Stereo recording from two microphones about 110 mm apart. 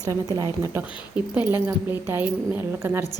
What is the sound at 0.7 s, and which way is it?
A woman's voice, 15° right (ahead or behind).